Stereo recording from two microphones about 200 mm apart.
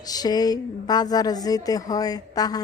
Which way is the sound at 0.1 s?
20° left (ahead or behind).